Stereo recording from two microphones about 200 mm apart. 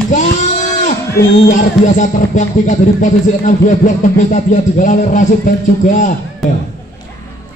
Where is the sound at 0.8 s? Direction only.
40° left (ahead or behind).